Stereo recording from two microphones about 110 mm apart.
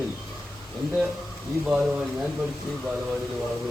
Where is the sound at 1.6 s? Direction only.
5° right (ahead or behind).